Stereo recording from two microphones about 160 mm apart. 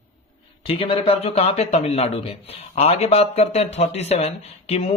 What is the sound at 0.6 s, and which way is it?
Speech, 35° left (ahead or behind).